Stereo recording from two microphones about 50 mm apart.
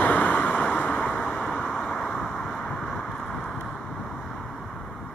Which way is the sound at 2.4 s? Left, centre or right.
Centre.